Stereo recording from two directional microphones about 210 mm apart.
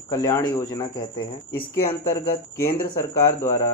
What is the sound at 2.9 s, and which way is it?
Speech, 15° left (ahead or behind).